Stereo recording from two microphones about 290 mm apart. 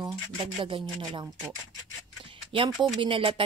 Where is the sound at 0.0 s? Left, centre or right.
Centre.